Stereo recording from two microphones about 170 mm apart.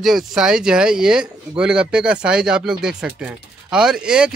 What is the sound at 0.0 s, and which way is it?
Speech, centre (ahead or behind).